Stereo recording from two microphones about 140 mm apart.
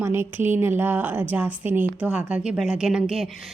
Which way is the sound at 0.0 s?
20° right (ahead or behind).